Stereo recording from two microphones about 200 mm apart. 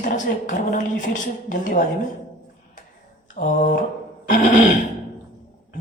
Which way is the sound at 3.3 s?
40° left (ahead or behind).